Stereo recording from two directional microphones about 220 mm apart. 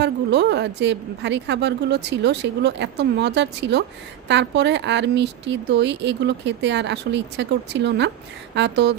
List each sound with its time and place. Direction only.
0.0 s speech: 50° right (ahead or behind)